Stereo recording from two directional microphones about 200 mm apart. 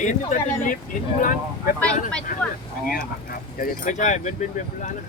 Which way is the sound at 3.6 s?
40° left (ahead or behind).